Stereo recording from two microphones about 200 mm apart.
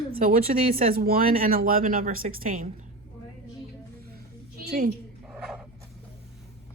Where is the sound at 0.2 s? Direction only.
45° right (ahead or behind).